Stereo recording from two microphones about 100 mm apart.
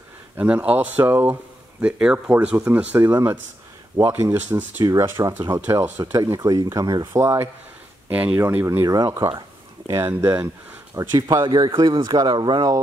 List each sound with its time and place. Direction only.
0.4 s speech: 15° right (ahead or behind)
4.8 s speech: 30° right (ahead or behind)
6.1 s speech: 35° right (ahead or behind)
7.1 s speech: 25° right (ahead or behind)
8.1 s speech: 15° right (ahead or behind)
8.8 s speech: 40° right (ahead or behind); by 10.5 s 25° right (ahead or behind)
11.0 s speech: 35° right (ahead or behind)
11.4 s speech: 45° right (ahead or behind)